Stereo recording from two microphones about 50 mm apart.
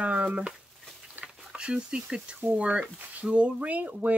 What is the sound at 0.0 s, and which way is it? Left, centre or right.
Speech, right.